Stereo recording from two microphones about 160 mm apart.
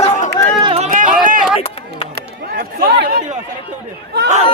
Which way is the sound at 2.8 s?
90° right.